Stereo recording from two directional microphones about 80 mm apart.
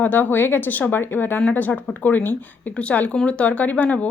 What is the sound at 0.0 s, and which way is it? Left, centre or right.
Speech, left.